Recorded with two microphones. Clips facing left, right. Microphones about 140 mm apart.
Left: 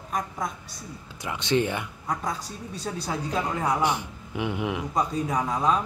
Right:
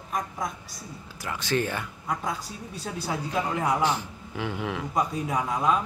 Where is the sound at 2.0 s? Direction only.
5° right (ahead or behind).